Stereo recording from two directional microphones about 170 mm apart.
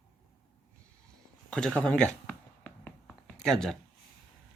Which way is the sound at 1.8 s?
5° left (ahead or behind).